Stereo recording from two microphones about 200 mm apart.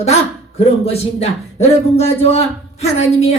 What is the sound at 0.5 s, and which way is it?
Speech, 30° left (ahead or behind).